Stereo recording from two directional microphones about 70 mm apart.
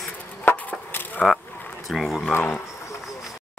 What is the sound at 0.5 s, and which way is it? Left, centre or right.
Chop, left.